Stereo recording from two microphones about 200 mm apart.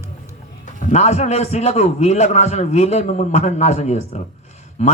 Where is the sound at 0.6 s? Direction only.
40° left (ahead or behind).